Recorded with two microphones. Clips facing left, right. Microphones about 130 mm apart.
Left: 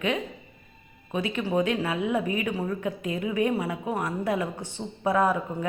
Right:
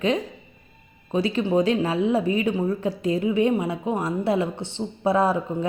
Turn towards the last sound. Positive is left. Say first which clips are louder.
# right 3 dB
turn(degrees=-30)  # may be behind; listen again after turning